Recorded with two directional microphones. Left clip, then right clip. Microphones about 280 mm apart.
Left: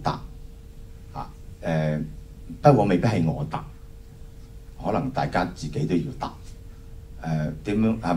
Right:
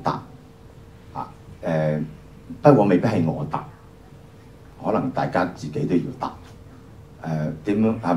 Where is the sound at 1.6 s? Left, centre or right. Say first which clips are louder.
Right 4 dB; left.